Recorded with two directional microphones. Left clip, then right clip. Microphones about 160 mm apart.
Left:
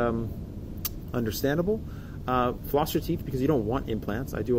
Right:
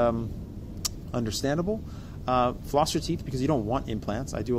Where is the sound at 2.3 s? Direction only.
30° right (ahead or behind).